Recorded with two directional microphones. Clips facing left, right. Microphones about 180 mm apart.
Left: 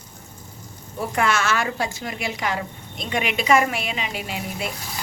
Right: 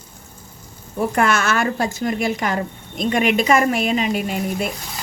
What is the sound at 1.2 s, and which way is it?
A woman's voice, 50° right (ahead or behind).